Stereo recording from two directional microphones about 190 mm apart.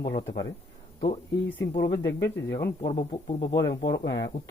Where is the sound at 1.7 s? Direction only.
20° left (ahead or behind).